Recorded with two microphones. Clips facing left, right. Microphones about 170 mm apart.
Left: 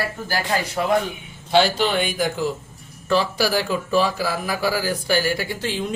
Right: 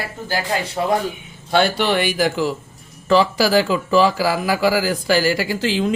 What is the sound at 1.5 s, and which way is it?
Speech, 60° right (ahead or behind).